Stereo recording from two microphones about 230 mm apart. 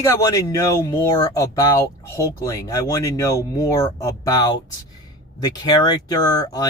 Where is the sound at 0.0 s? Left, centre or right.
Centre.